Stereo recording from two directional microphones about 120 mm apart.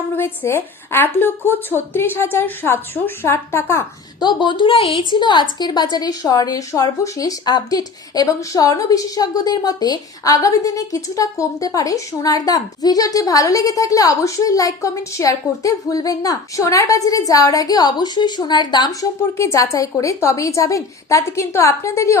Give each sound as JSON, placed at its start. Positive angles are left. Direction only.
{"t": 0.2, "sound": "a woman's voice", "side_deg": 20}
{"t": 4.2, "sound": "a woman's voice", "side_deg": 40}
{"t": 19.4, "sound": "a woman's voice", "side_deg": 25}